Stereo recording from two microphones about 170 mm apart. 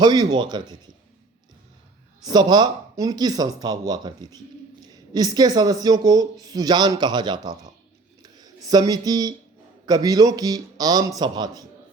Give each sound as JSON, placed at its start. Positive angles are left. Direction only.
{"t": 0.0, "sound": "speech", "side_deg": -25}
{"t": 2.2, "sound": "speech", "side_deg": -25}
{"t": 8.2, "sound": "a sound", "side_deg": -20}
{"t": 9.8, "sound": "speech", "side_deg": -20}